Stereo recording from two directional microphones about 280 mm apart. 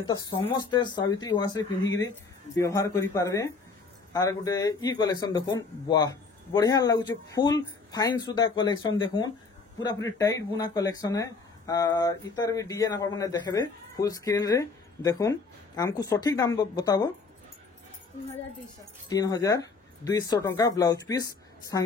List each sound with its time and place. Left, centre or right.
0.0 s speech: centre
19.0 s speech: centre